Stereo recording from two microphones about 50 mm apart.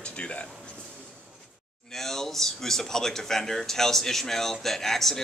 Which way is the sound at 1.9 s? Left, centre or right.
Centre.